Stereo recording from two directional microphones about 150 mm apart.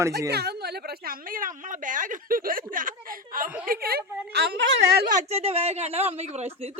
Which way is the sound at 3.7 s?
90° right.